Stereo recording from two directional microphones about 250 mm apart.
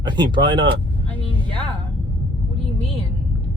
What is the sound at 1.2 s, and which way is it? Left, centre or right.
Music, centre.